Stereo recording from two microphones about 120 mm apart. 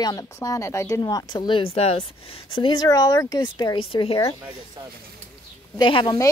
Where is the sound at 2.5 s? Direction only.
40° left (ahead or behind).